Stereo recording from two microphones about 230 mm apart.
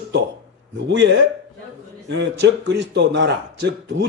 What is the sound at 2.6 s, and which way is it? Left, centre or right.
A man's voice, right.